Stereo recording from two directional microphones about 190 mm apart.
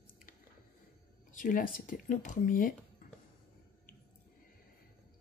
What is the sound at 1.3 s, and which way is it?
Speech, 45° left (ahead or behind).